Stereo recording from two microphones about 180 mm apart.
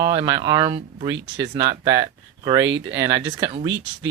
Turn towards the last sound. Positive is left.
turn(degrees=-25)  # may be behind; listen again after turning